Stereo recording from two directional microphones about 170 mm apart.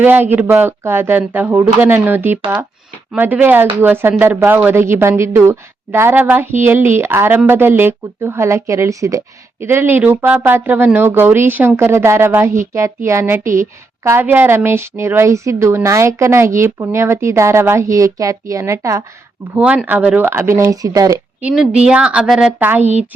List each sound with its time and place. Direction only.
0.0 s speech: 10° right (ahead or behind)
21.4 s speech: 5° right (ahead or behind)
22.8 s a woman's voice: 40° right (ahead or behind)